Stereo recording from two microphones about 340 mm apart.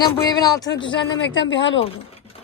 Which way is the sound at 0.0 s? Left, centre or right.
Centre.